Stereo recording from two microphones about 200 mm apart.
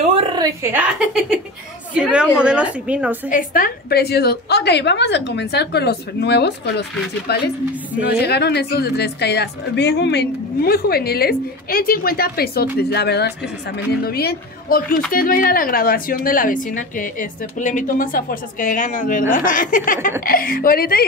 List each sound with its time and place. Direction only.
0.4 s a woman's voice: 15° right (ahead or behind)
3.3 s a woman's voice: 45° left (ahead or behind)